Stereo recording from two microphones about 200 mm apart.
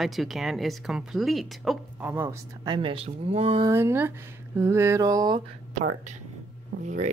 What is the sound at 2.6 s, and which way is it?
Speech, 25° right (ahead or behind).